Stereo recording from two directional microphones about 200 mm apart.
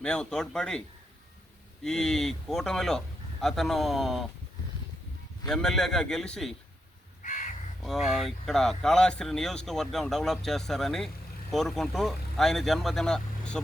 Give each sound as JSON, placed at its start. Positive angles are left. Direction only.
{"t": 0.0, "sound": "speech", "side_deg": 5}
{"t": 1.8, "sound": "speech", "side_deg": 0}
{"t": 5.5, "sound": "speech", "side_deg": 0}
{"t": 7.2, "sound": "crow", "side_deg": 40}
{"t": 7.8, "sound": "speech", "side_deg": 0}